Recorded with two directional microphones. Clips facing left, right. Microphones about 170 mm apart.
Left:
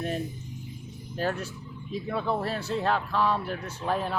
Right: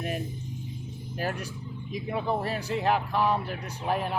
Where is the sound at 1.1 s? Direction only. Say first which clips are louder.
Left 3 dB; 10° right (ahead or behind).